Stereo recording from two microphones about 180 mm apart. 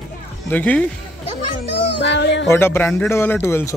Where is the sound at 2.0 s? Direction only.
75° left (ahead or behind).